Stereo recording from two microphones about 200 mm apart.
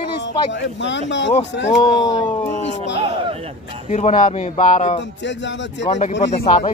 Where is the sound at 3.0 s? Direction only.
30° right (ahead or behind).